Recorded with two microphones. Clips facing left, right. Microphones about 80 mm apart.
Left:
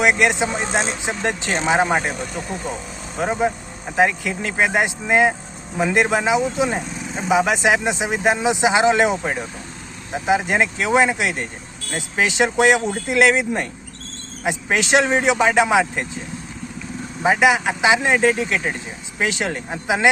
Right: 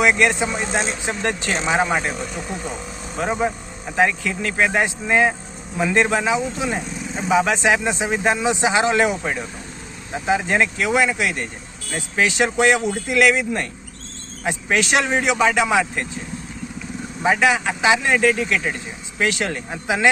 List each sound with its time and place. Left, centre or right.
0.0 s speech: centre
3.9 s speech: centre
17.2 s speech: centre